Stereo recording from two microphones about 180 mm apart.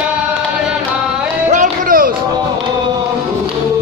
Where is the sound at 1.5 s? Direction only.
50° right (ahead or behind).